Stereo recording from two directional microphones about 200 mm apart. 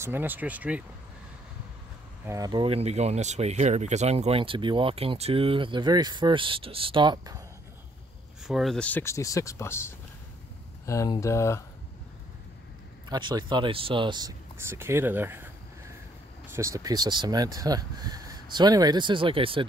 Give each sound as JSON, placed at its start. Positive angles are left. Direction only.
{"t": 0.0, "sound": "speech", "side_deg": -10}
{"t": 2.2, "sound": "speech", "side_deg": -20}
{"t": 8.5, "sound": "speech", "side_deg": 0}
{"t": 13.1, "sound": "speech", "side_deg": -20}
{"t": 16.5, "sound": "speech", "side_deg": -15}